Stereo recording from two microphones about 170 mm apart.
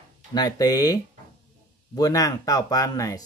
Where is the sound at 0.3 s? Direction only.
25° left (ahead or behind).